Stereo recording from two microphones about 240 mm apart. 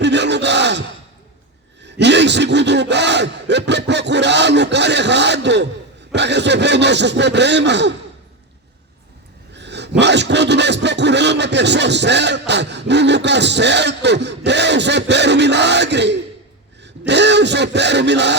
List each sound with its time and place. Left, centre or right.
0.0 s gasp: right
1.8 s speech: right
9.6 s a sound: right
10.0 s speech: right